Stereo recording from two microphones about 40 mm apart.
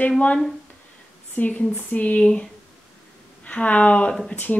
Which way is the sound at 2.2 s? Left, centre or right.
Left.